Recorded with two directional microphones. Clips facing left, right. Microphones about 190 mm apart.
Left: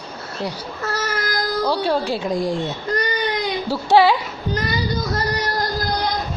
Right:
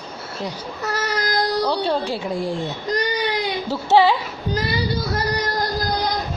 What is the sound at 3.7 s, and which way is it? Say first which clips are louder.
Speech: left 1 dB; 10° left (ahead or behind).